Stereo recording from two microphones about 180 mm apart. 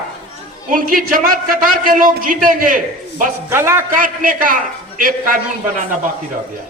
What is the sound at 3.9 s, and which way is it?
A man's voice, 50° right (ahead or behind).